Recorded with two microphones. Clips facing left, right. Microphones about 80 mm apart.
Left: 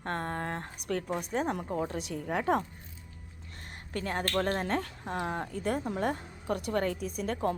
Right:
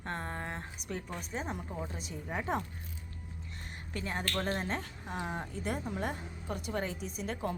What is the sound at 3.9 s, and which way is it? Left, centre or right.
A woman's voice, left.